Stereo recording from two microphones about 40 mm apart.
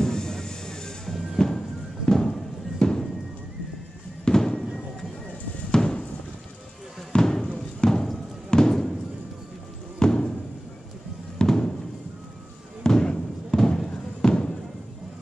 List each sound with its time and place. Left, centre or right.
0.0 s music: centre
4.2 s fireworks: centre
5.7 s a sound: centre
7.1 s a sound: centre
7.8 s music: centre
8.5 s a sound: centre
9.9 s music: centre
11.3 s fireworks: centre
12.8 s fireworks: centre